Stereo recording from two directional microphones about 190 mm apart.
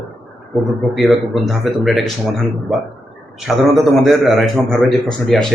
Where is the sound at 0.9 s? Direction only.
Centre (ahead or behind).